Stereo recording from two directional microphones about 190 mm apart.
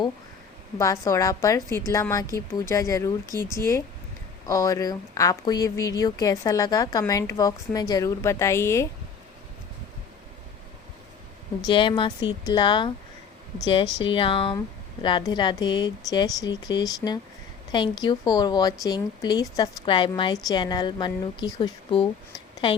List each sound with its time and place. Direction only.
0.8 s a woman's voice: 15° left (ahead or behind)
11.6 s speech: 25° left (ahead or behind)
14.0 s speech: 25° left (ahead or behind)